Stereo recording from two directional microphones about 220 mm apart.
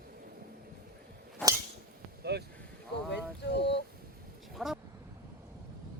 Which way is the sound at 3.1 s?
50° left (ahead or behind).